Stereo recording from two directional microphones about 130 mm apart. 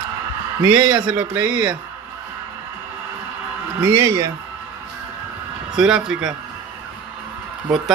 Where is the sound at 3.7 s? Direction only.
25° right (ahead or behind).